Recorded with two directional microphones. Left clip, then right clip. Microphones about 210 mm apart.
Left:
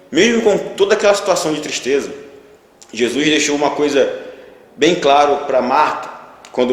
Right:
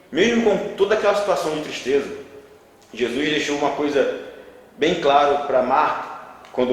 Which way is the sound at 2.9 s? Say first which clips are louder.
Left 7 dB; 50° left (ahead or behind).